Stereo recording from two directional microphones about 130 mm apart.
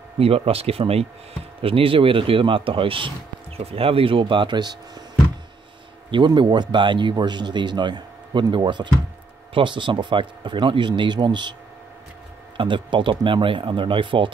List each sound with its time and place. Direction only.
0.2 s speech: 50° right (ahead or behind); by 5.0 s 30° right (ahead or behind)
6.0 s speech: 35° right (ahead or behind)
12.5 s speech: 40° right (ahead or behind)